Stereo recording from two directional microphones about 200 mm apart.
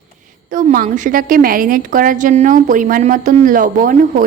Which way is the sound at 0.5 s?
45° right (ahead or behind).